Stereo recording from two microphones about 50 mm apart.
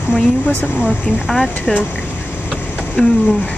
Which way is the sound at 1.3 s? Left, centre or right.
Centre.